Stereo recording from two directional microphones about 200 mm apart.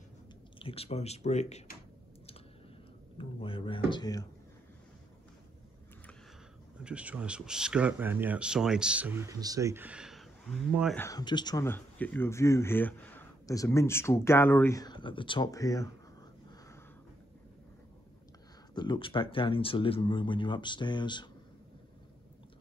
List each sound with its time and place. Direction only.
0.6 s speech: 30° left (ahead or behind)
3.2 s speech: 25° left (ahead or behind)
6.8 s speech: 5° right (ahead or behind)
11.0 s speech: 15° left (ahead or behind)
18.8 s speech: 25° left (ahead or behind)